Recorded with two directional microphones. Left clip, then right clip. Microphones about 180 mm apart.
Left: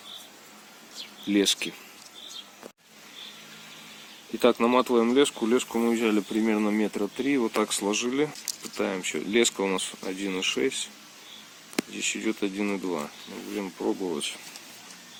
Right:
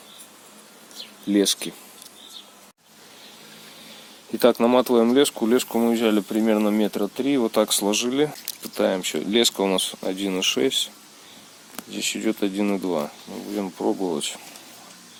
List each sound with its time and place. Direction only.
1.3 s speech: 45° right (ahead or behind)
4.4 s speech: 60° right (ahead or behind)
11.9 s speech: 55° right (ahead or behind)